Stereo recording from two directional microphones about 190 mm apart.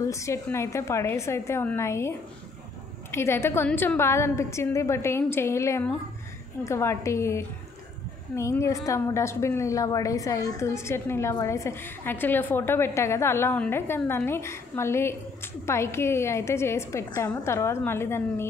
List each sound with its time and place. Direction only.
0.0 s a woman's voice: 15° left (ahead or behind)